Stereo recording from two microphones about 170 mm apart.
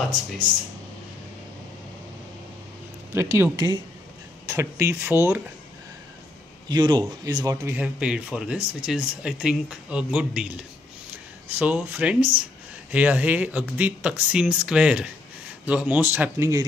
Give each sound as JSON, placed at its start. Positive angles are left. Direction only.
{"t": 3.2, "sound": "speech", "side_deg": -15}
{"t": 6.7, "sound": "speech", "side_deg": -25}
{"t": 7.7, "sound": "speech", "side_deg": -5}